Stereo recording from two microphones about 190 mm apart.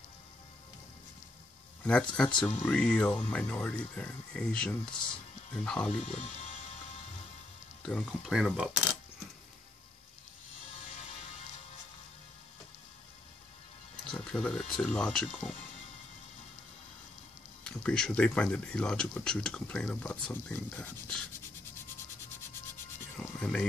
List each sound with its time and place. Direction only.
1.9 s speech: 5° left (ahead or behind)
6.0 s speech: 35° left (ahead or behind)
7.8 s speech: 5° left (ahead or behind)
14.1 s speech: 5° left (ahead or behind)
17.6 s speech: 5° left (ahead or behind)
23.1 s speech: 5° left (ahead or behind)